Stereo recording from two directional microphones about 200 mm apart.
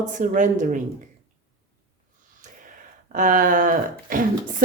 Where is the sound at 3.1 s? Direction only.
40° right (ahead or behind).